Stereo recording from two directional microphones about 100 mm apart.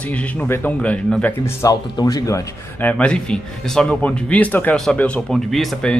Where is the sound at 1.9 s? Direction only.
40° left (ahead or behind).